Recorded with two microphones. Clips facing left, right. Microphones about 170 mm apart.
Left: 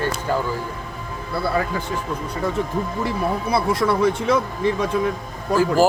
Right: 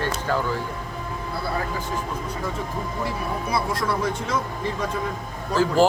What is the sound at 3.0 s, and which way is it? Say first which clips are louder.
Speech: left 4 dB; 65° left (ahead or behind).